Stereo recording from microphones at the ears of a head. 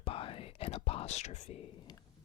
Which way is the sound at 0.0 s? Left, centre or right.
Left.